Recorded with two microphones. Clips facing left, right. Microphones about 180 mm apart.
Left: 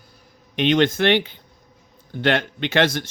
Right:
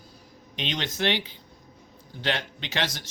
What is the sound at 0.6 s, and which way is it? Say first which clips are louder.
Speech: left 12 dB; 55° left (ahead or behind).